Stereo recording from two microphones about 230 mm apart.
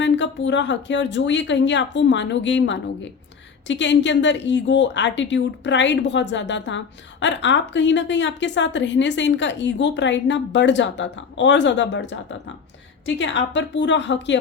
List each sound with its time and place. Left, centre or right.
0.0 s a woman's voice: left